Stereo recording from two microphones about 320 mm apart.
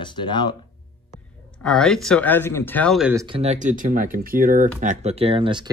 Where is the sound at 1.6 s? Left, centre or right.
Centre.